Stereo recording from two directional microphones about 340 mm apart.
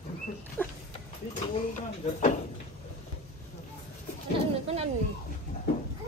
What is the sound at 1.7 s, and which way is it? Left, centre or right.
Speech, left.